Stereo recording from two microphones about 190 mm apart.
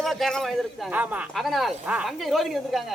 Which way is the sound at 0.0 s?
Centre (ahead or behind).